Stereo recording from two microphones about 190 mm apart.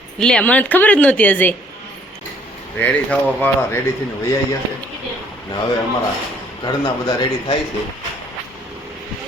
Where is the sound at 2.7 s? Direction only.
10° left (ahead or behind).